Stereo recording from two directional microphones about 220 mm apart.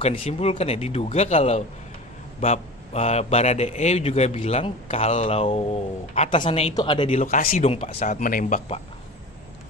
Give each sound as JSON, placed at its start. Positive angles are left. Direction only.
{"t": 0.0, "sound": "a man's voice", "side_deg": 25}
{"t": 7.2, "sound": "speech", "side_deg": 35}